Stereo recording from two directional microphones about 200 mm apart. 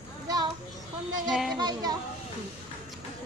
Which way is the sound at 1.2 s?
Centre (ahead or behind).